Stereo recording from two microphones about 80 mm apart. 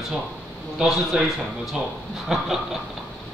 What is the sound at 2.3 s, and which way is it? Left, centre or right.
Speech, centre.